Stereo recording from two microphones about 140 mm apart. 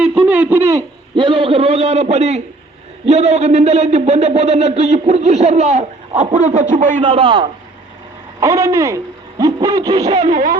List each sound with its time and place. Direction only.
0.3 s hoot: 15° right (ahead or behind)
1.1 s speech: 35° right (ahead or behind); by 7.0 s 60° right (ahead or behind)
7.0 s a man's voice: 40° right (ahead or behind)
8.4 s hoot: 20° right (ahead or behind)
10.2 s speech: 65° right (ahead or behind)